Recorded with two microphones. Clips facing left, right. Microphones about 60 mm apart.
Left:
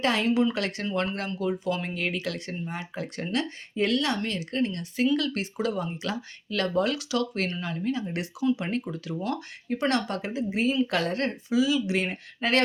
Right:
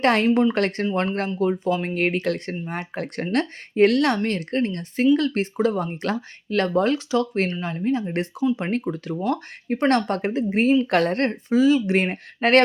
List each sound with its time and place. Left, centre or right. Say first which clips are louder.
0.0 s speech: right 6 dB; right
4.2 s speech: right 5 dB; right